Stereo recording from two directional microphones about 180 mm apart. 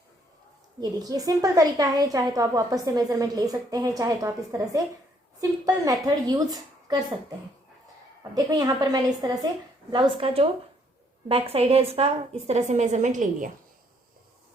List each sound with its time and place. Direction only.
0.8 s a woman's voice: 20° right (ahead or behind); by 13.5 s 45° right (ahead or behind)